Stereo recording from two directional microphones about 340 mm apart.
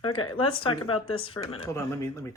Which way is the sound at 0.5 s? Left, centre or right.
Centre.